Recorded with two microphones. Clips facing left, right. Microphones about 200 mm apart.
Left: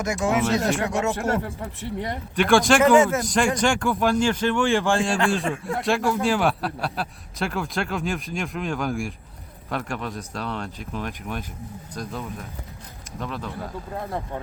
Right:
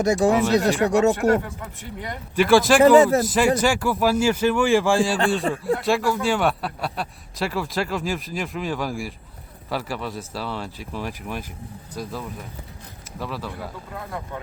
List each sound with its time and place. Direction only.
0.0 s speech: 35° right (ahead or behind)
2.3 s a man's voice: 5° right (ahead or behind)
2.8 s speech: 35° right (ahead or behind)
3.2 s a man's voice: 5° right (ahead or behind)
5.5 s speech: 35° right (ahead or behind)
5.8 s a man's voice: centre (ahead or behind)